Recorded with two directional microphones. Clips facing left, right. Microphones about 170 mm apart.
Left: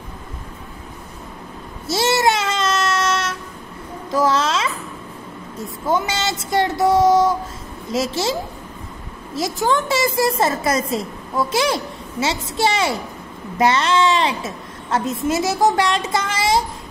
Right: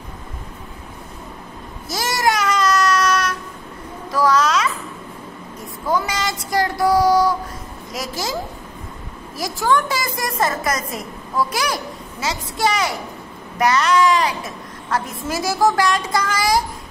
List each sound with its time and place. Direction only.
1.9 s child singing: 25° left (ahead or behind)
4.1 s a sound: 25° left (ahead or behind)
5.9 s a woman's voice: 25° left (ahead or behind)